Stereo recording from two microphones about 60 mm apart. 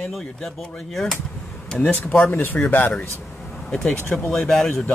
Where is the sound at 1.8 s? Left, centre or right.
Left.